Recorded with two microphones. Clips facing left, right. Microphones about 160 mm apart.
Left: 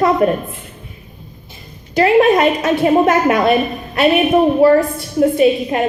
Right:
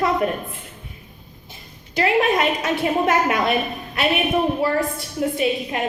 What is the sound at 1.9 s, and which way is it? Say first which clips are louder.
A woman's voice: left 8 dB; 45° left (ahead or behind).